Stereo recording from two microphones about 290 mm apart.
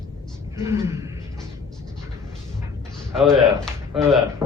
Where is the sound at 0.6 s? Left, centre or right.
Centre.